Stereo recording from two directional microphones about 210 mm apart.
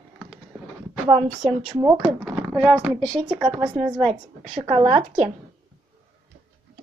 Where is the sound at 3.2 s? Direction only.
25° right (ahead or behind).